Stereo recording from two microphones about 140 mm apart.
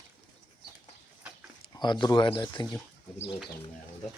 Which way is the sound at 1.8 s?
30° left (ahead or behind).